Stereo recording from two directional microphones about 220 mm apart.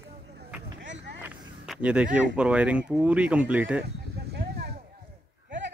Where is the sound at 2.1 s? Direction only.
5° right (ahead or behind).